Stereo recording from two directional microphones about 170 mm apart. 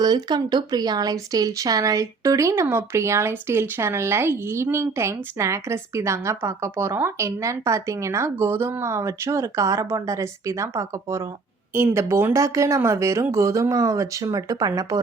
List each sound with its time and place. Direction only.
0.0 s speech: 25° right (ahead or behind)